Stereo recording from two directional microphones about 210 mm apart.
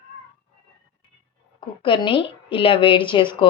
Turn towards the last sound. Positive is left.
turn(degrees=25)  # may be behind; listen again after turning